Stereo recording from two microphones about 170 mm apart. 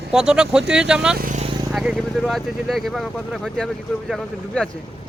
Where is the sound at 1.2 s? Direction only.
50° right (ahead or behind).